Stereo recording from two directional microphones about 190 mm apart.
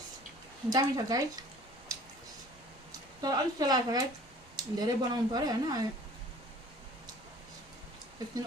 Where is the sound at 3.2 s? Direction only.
20° right (ahead or behind).